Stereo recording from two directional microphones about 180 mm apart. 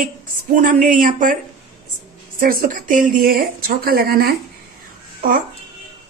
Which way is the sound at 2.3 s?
50° right (ahead or behind).